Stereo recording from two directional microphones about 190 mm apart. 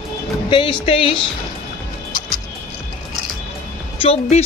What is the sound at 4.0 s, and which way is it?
Speech, 30° left (ahead or behind).